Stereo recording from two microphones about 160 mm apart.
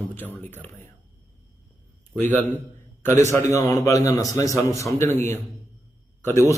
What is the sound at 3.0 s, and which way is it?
A man's voice, 15° left (ahead or behind).